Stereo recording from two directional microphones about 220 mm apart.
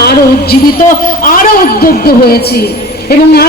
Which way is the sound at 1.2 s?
40° left (ahead or behind).